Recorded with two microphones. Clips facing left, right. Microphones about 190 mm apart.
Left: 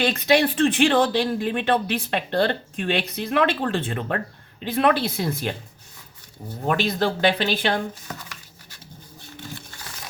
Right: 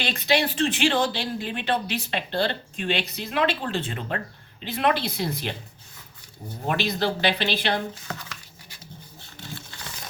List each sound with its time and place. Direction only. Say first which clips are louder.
0.0 s speech: left 5 dB; 50° left (ahead or behind)
6.7 s speech: left 3 dB; 50° left (ahead or behind)